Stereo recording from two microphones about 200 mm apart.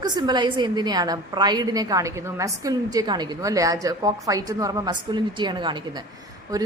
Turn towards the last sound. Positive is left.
turn(degrees=-20)  # may be behind; listen again after turning